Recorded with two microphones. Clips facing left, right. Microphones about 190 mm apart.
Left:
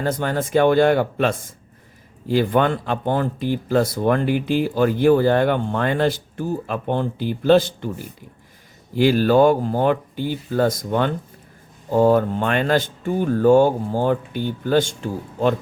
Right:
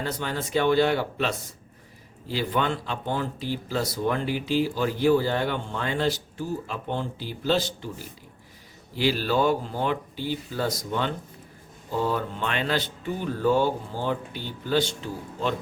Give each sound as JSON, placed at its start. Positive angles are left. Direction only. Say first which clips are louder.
{"t": 0.0, "sound": "speech", "louder": "left 8 dB", "side_deg": 50}